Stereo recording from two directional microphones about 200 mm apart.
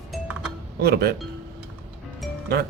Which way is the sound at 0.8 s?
50° right (ahead or behind).